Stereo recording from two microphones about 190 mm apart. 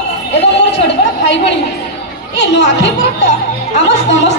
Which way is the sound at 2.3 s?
70° left (ahead or behind).